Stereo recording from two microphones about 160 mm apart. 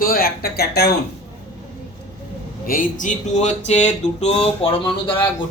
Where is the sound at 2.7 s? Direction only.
55° left (ahead or behind).